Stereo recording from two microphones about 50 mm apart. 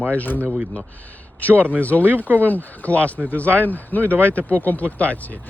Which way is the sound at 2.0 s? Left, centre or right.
Right.